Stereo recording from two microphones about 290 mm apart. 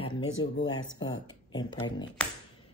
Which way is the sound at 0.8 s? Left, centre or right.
Left.